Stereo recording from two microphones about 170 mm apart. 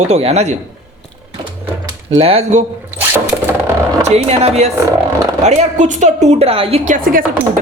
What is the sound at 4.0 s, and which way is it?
A woman's voice, 40° right (ahead or behind).